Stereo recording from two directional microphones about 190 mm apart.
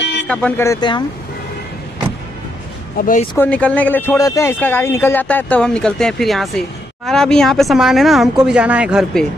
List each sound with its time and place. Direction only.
0.0 s a sound: 65° left (ahead or behind)
0.3 s speech: 5° left (ahead or behind); by 1.0 s 20° left (ahead or behind)
3.0 s speech: 45° left (ahead or behind)
3.3 s speech: 5° left (ahead or behind)